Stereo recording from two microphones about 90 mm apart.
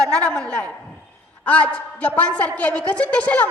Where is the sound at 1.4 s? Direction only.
15° left (ahead or behind).